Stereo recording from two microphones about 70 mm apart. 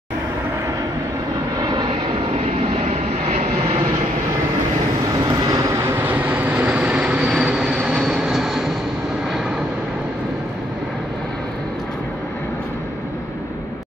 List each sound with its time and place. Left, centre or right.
1.6 s vehicle: right
5.1 s vehicle: right
5.9 s vehicle: right; by 8.6 s centre